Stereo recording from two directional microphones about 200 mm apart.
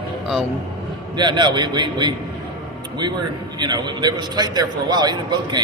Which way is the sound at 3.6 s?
20° right (ahead or behind).